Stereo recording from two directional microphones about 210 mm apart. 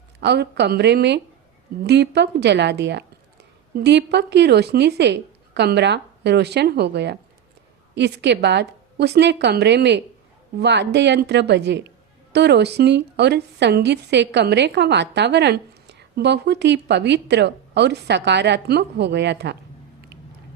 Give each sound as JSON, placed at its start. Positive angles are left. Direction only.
{"t": 0.2, "sound": "a woman's voice", "side_deg": -55}